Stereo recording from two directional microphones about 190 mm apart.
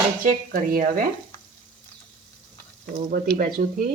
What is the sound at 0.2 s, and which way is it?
Speech, 45° right (ahead or behind).